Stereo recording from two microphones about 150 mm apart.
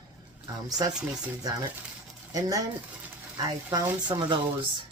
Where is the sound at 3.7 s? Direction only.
30° right (ahead or behind).